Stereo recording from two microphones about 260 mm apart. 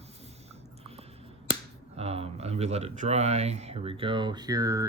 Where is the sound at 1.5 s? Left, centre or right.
Right.